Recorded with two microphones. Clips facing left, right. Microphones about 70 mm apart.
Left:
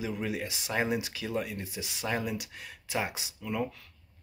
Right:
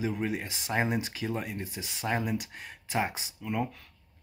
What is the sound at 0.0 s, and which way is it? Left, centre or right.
Speech, right.